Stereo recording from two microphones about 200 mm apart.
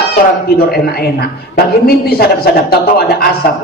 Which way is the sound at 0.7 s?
50° left (ahead or behind).